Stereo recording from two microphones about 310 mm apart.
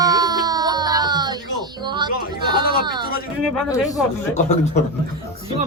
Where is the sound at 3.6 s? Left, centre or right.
Centre.